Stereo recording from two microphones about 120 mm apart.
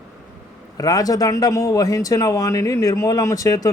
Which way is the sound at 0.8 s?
30° left (ahead or behind).